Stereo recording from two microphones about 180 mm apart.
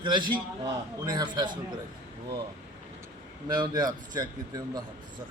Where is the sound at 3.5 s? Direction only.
20° right (ahead or behind).